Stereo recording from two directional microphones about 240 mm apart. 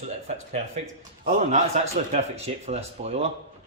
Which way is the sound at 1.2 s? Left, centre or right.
Right.